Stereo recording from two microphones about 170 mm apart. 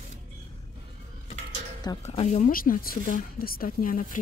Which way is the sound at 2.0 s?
40° left (ahead or behind).